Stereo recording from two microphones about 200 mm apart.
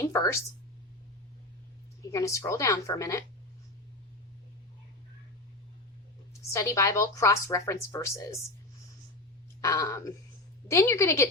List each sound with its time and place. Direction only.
0.0 s a woman's voice: 15° left (ahead or behind)
2.1 s speech: 15° left (ahead or behind)
6.5 s speech: 15° left (ahead or behind)
9.6 s speech: 15° left (ahead or behind)